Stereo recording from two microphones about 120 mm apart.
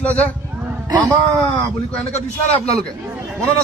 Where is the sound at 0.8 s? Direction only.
35° right (ahead or behind).